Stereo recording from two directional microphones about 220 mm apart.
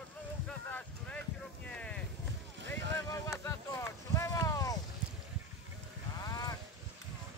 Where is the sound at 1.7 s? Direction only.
5° left (ahead or behind).